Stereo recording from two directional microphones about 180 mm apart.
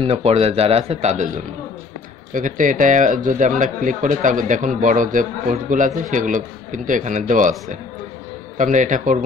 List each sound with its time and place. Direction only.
0.0 s speech: 35° right (ahead or behind)
8.5 s speech: 45° right (ahead or behind)